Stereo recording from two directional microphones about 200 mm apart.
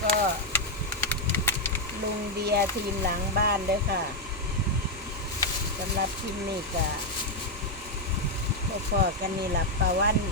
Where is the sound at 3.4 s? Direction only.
50° right (ahead or behind).